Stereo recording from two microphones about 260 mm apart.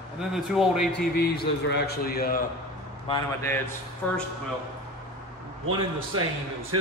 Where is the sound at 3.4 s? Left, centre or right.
Centre.